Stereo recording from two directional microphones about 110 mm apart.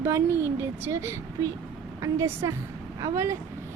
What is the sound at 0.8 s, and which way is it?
A woman's voice, 25° right (ahead or behind).